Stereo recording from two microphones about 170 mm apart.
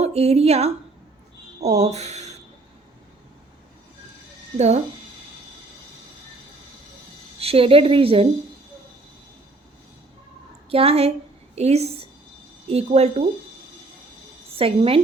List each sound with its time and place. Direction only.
0.0 s speech: 40° right (ahead or behind)
4.5 s a woman's voice: 40° right (ahead or behind)
7.3 s a woman's voice: 35° right (ahead or behind)
10.7 s a woman's voice: 35° right (ahead or behind)
14.5 s a woman's voice: 35° right (ahead or behind)